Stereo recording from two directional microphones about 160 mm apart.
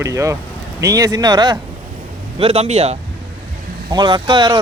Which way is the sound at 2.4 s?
40° right (ahead or behind).